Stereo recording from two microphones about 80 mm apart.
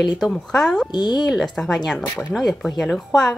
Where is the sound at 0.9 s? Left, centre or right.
Left.